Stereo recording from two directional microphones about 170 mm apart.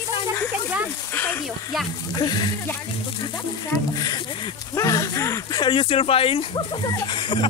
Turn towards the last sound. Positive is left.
turn(degrees=30)  # may be behind; listen again after turning